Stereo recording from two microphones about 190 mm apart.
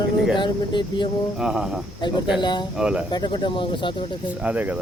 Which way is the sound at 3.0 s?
25° left (ahead or behind).